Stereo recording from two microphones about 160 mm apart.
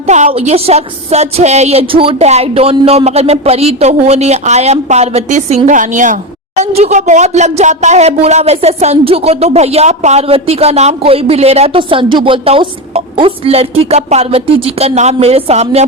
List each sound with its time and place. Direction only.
0.1 s a woman's voice: 45° right (ahead or behind)